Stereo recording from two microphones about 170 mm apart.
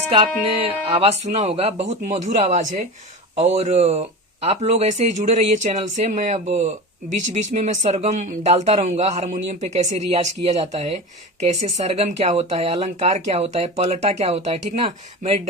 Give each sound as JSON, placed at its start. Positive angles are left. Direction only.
{"t": 0.4, "sound": "speech", "side_deg": -35}